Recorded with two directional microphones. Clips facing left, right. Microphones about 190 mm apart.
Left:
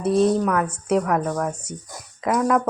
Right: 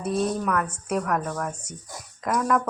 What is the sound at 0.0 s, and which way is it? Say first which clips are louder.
Speech: left 7 dB; 30° left (ahead or behind).